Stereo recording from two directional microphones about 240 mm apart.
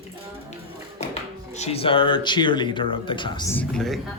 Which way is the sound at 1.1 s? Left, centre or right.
Left.